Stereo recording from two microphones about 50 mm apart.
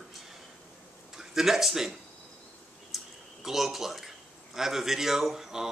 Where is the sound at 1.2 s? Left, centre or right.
Centre.